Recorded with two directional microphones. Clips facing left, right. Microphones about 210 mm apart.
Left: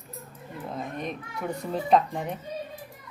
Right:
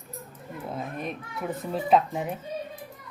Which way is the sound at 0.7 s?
5° right (ahead or behind).